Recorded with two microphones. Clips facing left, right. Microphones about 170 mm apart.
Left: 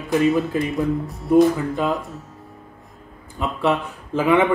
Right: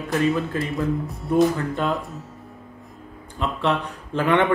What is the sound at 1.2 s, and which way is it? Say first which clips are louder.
Speech: left 4 dB; centre (ahead or behind).